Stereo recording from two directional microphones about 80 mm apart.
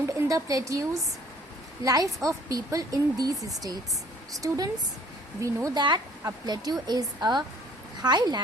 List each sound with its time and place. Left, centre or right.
0.0 s a woman's voice: right
4.4 s speech: right
5.7 s speech: right
6.2 s speech: right